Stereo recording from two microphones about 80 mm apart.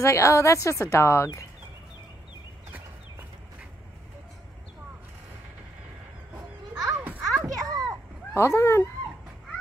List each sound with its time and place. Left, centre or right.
0.0 s a woman's voice: left
7.2 s children playing: centre
8.4 s a woman's voice: left